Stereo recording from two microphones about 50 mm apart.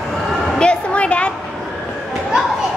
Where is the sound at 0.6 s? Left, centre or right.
Left.